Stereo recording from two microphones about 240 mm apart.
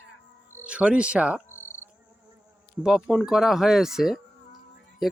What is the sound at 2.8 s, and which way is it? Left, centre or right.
Speech, centre.